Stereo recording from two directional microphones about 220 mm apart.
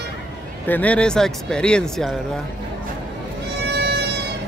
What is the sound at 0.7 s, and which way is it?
Speech, 5° left (ahead or behind).